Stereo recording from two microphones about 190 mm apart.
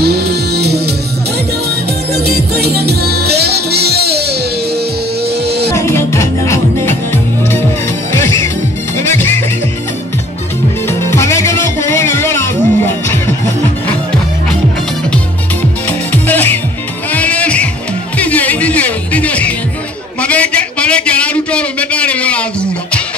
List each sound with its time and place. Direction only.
0.0 s music: 60° right (ahead or behind)
2.1 s music: 55° right (ahead or behind)
5.7 s music: 15° left (ahead or behind)
8.1 s music: 15° left (ahead or behind)
10.9 s music: 15° left (ahead or behind)
16.1 s music: 10° left (ahead or behind)
20.2 s a sound: 5° left (ahead or behind)